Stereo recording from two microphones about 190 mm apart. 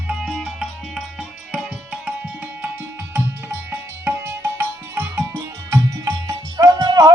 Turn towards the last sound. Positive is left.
turn(degrees=-20)  # may be behind; listen again after turning